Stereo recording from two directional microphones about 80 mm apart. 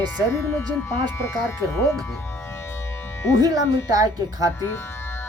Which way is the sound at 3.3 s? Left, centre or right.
Right.